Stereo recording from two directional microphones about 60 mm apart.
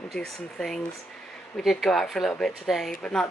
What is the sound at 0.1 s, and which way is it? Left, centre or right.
Speech, centre.